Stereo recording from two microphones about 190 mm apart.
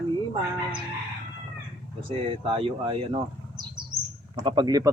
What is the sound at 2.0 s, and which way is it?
Speech, 30° right (ahead or behind).